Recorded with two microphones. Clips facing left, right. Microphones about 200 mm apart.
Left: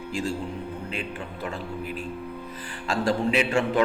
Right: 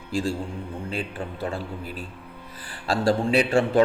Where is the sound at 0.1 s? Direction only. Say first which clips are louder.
Right 3 dB; 30° right (ahead or behind).